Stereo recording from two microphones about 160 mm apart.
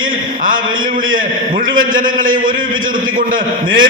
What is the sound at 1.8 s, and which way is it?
Speech, 60° right (ahead or behind).